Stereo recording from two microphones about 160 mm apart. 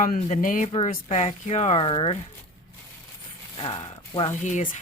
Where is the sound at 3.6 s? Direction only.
35° left (ahead or behind).